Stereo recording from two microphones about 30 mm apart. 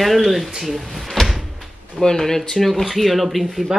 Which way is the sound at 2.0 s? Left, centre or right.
Centre.